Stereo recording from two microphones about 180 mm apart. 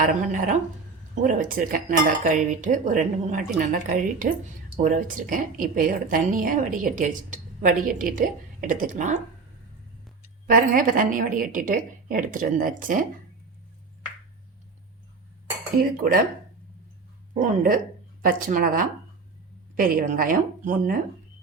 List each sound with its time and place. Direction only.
0.0 s speech: 45° right (ahead or behind)
10.4 s speech: 50° right (ahead or behind)
17.4 s speech: 50° right (ahead or behind)